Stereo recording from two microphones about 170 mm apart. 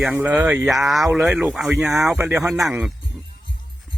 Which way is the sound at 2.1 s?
15° right (ahead or behind).